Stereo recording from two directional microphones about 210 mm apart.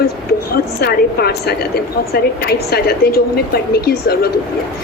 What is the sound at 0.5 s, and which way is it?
A woman's voice, 50° left (ahead or behind).